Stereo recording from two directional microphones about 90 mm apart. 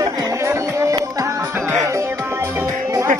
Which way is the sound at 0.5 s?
35° right (ahead or behind).